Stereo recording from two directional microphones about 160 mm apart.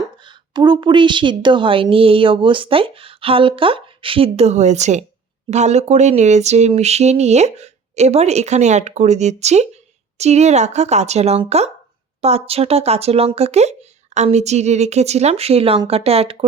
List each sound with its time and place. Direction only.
0.2 s a woman's voice: 30° right (ahead or behind)